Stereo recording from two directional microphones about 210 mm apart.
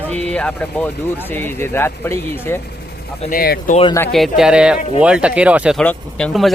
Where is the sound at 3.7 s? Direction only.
25° left (ahead or behind).